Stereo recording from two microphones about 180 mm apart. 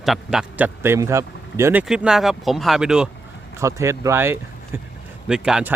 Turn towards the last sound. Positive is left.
turn(degrees=-5)  # may be behind; listen again after turning